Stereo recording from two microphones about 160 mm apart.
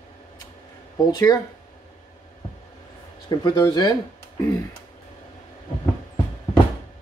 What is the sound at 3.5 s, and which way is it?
Speech, 25° left (ahead or behind).